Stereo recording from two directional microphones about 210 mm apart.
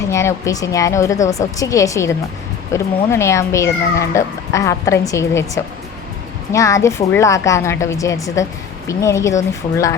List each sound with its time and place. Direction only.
0.1 s speech: 15° left (ahead or behind)
6.5 s speech: 15° left (ahead or behind)